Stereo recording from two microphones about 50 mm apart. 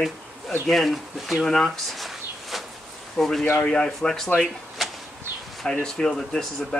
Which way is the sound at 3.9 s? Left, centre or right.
Centre.